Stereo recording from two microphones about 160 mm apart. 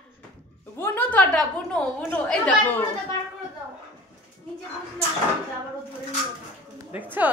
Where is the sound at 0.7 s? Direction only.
15° left (ahead or behind).